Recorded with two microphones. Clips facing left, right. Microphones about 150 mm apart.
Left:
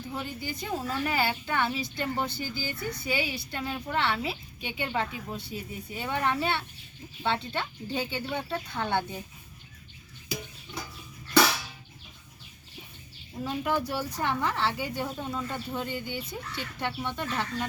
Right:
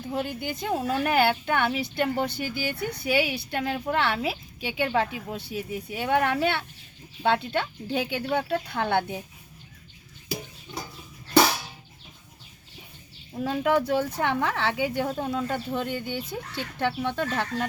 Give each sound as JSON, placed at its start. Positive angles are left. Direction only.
{"t": 0.1, "sound": "a woman's voice", "side_deg": -65}
{"t": 13.4, "sound": "speech", "side_deg": -70}